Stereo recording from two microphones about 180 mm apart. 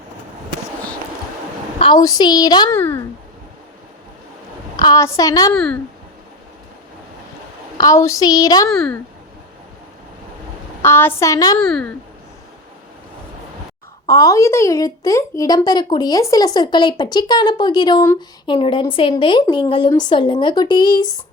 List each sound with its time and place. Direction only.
1.8 s speech: 25° left (ahead or behind)
2.7 s a woman's voice: 10° left (ahead or behind)
4.8 s speech: 20° left (ahead or behind)
5.5 s speech: 5° left (ahead or behind)
7.8 s speech: 20° left (ahead or behind)
8.7 s speech: 5° left (ahead or behind)
10.8 s a woman's voice: 10° left (ahead or behind)
11.6 s speech: 5° left (ahead or behind)
14.1 s speech: 20° left (ahead or behind)